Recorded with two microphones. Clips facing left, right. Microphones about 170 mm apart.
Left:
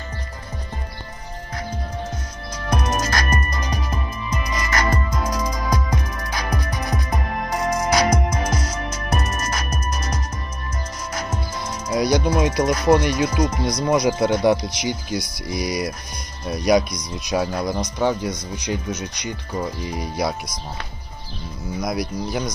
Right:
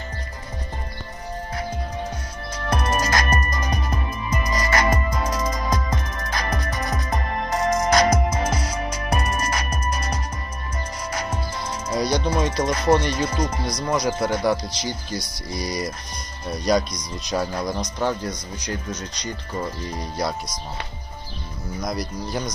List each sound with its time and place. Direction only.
2.5 s music: 5° right (ahead or behind)
3.5 s music: 50° right (ahead or behind)
4.7 s music: 25° right (ahead or behind)
5.2 s music: 5° right (ahead or behind)
11.9 s speech: 10° left (ahead or behind)
21.8 s speech: 5° left (ahead or behind)